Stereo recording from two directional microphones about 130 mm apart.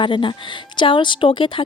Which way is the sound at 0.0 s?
40° left (ahead or behind).